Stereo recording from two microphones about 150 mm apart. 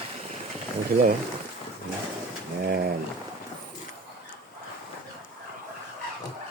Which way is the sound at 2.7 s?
75° right (ahead or behind).